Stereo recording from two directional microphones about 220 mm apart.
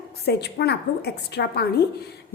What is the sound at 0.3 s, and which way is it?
A woman's voice, 50° left (ahead or behind).